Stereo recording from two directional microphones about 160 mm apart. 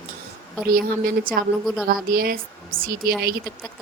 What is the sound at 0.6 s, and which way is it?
Speech, 65° right (ahead or behind).